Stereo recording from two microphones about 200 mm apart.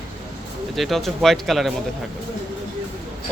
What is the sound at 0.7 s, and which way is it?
Speech, centre (ahead or behind).